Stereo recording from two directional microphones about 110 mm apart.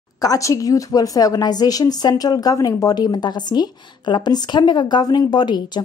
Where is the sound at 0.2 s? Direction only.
30° left (ahead or behind).